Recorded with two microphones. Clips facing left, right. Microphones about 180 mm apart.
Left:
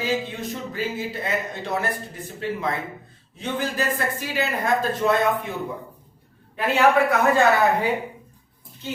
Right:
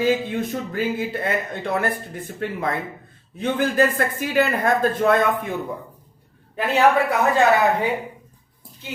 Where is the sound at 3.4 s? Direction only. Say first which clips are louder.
Right 7 dB; 55° right (ahead or behind).